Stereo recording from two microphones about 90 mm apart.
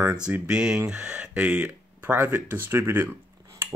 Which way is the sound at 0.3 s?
10° right (ahead or behind).